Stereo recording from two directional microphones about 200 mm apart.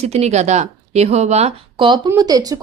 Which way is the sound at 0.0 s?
35° right (ahead or behind).